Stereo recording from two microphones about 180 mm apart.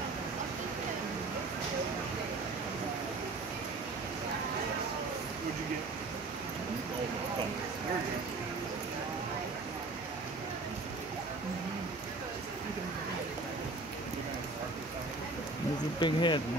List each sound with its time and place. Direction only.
16.0 s speech: 25° left (ahead or behind)